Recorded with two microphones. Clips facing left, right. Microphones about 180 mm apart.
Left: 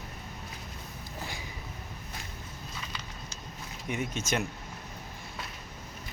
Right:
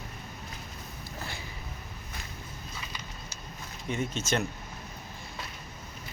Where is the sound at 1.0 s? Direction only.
15° left (ahead or behind).